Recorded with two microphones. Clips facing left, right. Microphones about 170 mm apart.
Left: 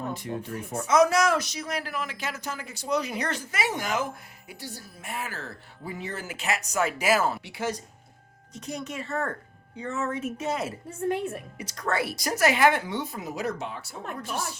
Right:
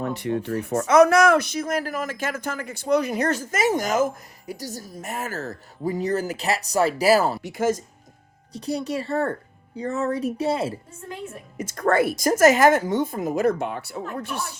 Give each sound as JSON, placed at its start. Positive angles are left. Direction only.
{"t": 0.0, "sound": "speech", "side_deg": -70}
{"t": 8.5, "sound": "a woman's voice", "side_deg": -35}
{"t": 10.8, "sound": "a woman's voice", "side_deg": 65}
{"t": 11.5, "sound": "speech", "side_deg": -50}